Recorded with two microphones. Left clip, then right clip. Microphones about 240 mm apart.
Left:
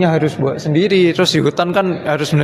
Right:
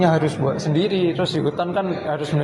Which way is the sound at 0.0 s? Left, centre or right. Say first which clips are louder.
Left 3 dB; left.